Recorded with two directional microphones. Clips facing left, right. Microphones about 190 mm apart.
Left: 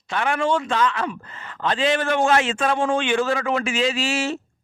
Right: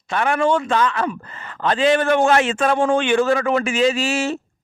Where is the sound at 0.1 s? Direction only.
45° right (ahead or behind).